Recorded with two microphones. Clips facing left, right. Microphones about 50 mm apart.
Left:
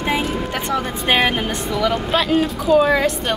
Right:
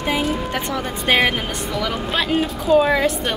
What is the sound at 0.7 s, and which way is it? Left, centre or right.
Speech, centre.